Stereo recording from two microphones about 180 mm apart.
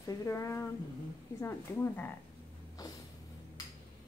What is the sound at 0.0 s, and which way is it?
Speech, 20° left (ahead or behind).